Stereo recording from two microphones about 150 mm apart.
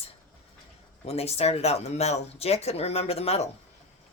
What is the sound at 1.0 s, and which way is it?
Speech, 40° left (ahead or behind).